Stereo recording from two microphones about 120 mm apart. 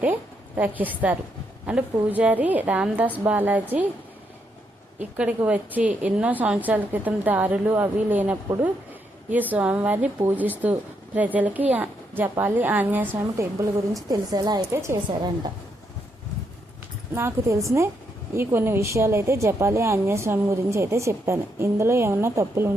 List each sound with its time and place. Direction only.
0.0 s a sound: 15° right (ahead or behind)
0.8 s a woman's voice: 15° right (ahead or behind)
4.9 s a woman's voice: 10° right (ahead or behind); by 15.3 s 25° right (ahead or behind)
17.2 s a woman's voice: 20° right (ahead or behind)